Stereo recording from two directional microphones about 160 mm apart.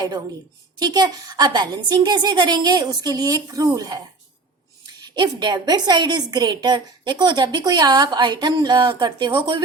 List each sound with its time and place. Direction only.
0.8 s a woman's voice: 25° right (ahead or behind)
5.1 s a woman's voice: 30° right (ahead or behind)